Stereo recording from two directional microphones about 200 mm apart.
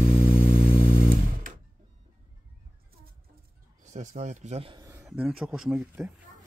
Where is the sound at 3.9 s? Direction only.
35° right (ahead or behind); by 5.0 s 15° right (ahead or behind).